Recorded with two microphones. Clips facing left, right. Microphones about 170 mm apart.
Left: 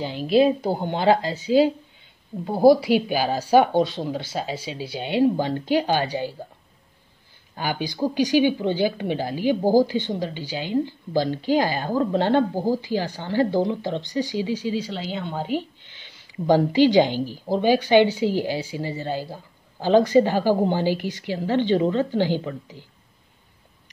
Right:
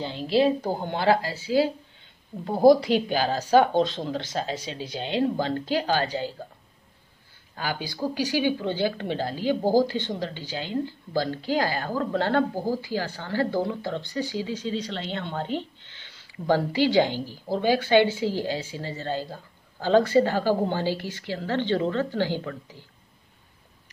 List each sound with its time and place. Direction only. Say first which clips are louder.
0.0 s speech: left 4 dB; 15° left (ahead or behind)
2.4 s speech: left 1 dB; 5° left (ahead or behind)
7.5 s speech: left 4 dB; 20° left (ahead or behind)